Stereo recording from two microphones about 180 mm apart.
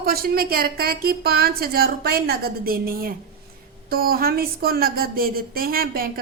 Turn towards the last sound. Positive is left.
turn(degrees=-55)  # may be behind; listen again after turning